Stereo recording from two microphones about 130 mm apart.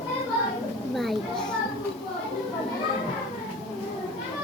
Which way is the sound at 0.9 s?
Centre (ahead or behind).